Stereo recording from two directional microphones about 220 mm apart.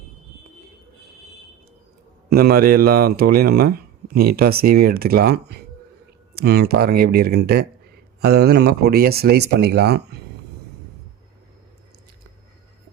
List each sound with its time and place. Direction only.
2.3 s speech: 45° right (ahead or behind)